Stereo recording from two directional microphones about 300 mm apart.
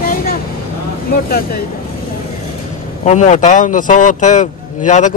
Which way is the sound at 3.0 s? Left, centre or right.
Left.